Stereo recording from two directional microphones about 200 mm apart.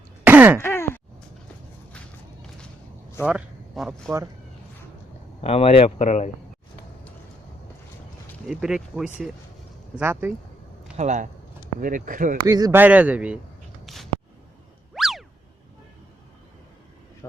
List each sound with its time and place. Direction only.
0.3 s throat clearing: 10° right (ahead or behind)
0.6 s groan: 10° left (ahead or behind)
3.2 s speech: 5° right (ahead or behind)
5.4 s speech: 30° left (ahead or behind)
8.4 s speech: 5° right (ahead or behind)
10.9 s speech: 35° right (ahead or behind)
12.5 s speech: 20° right (ahead or behind)
13.8 s a sound: centre (ahead or behind)
14.9 s boing: centre (ahead or behind)